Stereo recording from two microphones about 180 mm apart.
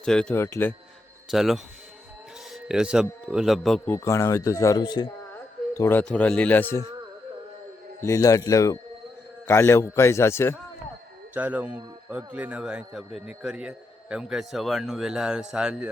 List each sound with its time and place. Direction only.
0.0 s a man's voice: 5° left (ahead or behind)
0.4 s speech: 15° left (ahead or behind)
1.3 s a man's voice: centre (ahead or behind)
3.8 s speech: 15° left (ahead or behind)
5.7 s speech: 15° left (ahead or behind)
8.0 s speech: 15° left (ahead or behind)
11.3 s a man's voice: 10° right (ahead or behind)